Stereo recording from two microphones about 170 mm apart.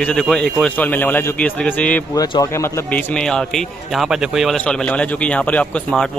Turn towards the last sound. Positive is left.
turn(degrees=5)  # may be behind; listen again after turning